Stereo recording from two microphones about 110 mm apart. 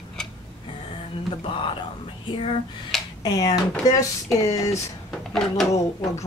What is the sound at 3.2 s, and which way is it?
Speech, 40° left (ahead or behind).